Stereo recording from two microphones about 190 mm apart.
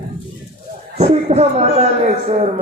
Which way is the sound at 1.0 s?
35° right (ahead or behind).